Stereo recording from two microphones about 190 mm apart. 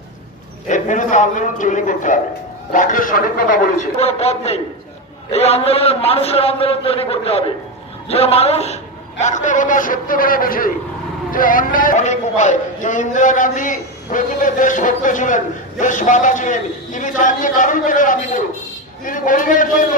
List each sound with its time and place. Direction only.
0.7 s a man's voice: 40° left (ahead or behind)